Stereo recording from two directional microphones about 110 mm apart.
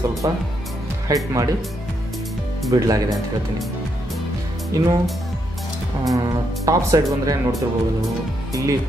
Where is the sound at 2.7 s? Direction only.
35° right (ahead or behind).